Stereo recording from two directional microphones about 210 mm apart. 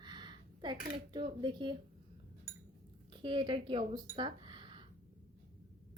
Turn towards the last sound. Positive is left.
turn(degrees=-25)  # may be behind; listen again after turning